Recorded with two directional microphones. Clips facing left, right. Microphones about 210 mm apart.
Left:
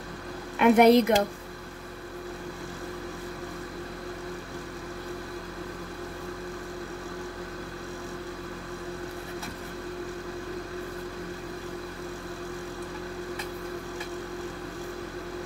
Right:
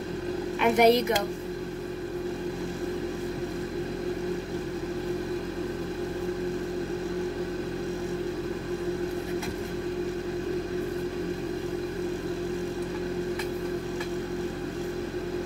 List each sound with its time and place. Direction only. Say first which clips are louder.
0.6 s speech: left 3 dB; 55° left (ahead or behind)